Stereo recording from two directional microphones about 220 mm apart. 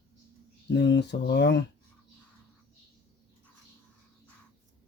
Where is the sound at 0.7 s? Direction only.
50° left (ahead or behind).